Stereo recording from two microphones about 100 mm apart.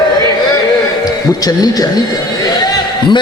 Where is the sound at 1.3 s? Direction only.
40° left (ahead or behind).